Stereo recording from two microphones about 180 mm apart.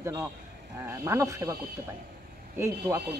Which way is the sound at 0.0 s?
15° right (ahead or behind).